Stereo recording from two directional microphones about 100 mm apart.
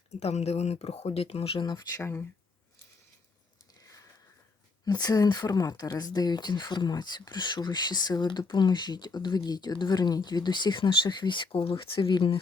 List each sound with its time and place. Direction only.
0.1 s speech: 90° left; by 1.6 s 70° left (ahead or behind)
1.6 s speech: 45° left (ahead or behind)
2.0 s speech: 25° left (ahead or behind)
3.8 s a sound: 35° left (ahead or behind)
4.9 s speech: 40° left (ahead or behind)